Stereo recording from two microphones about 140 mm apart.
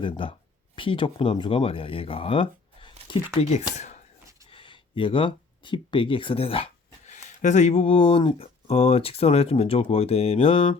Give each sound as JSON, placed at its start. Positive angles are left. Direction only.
{"t": 0.0, "sound": "speech", "side_deg": 40}
{"t": 3.4, "sound": "speech", "side_deg": 50}
{"t": 4.4, "sound": "a sound", "side_deg": 40}
{"t": 7.1, "sound": "speech", "side_deg": 60}